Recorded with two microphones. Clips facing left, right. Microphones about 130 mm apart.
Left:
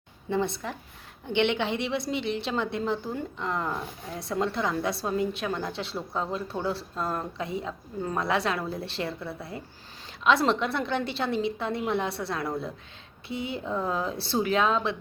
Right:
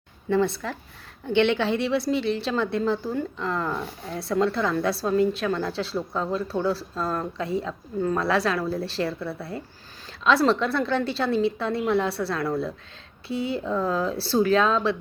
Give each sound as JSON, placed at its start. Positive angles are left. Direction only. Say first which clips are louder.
{"t": 0.3, "sound": "a woman's voice", "louder": "right 5 dB", "side_deg": 20}